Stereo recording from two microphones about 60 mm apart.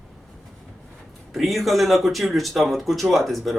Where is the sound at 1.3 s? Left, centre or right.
Centre.